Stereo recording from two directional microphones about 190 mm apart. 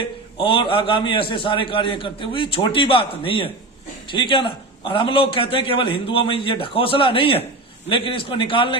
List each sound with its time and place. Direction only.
0.3 s a man's voice: 25° left (ahead or behind)